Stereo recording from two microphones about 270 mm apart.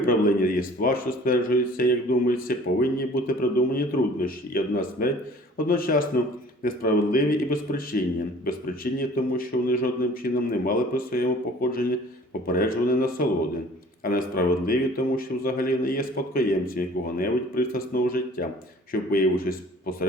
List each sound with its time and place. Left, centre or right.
0.0 s a man's voice: left